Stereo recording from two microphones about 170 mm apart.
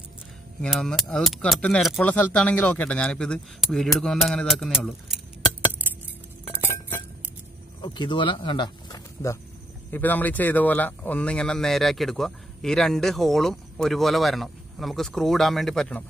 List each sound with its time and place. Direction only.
0.6 s speech: centre (ahead or behind)
5.9 s music: 10° right (ahead or behind)
7.8 s speech: 25° left (ahead or behind); by 16.0 s 5° left (ahead or behind)